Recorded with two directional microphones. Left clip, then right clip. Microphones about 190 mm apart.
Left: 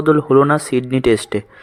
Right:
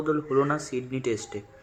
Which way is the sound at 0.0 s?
50° left (ahead or behind).